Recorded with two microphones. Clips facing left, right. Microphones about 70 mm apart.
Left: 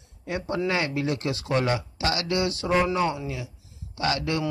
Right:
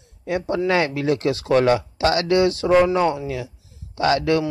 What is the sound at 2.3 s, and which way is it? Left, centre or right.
Speech, right.